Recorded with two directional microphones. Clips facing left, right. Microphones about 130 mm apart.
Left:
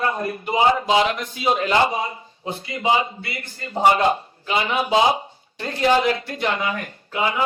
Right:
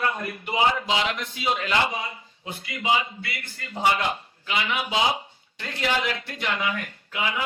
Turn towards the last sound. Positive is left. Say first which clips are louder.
# left 6 dB
turn(degrees=35)  # may be behind; listen again after turning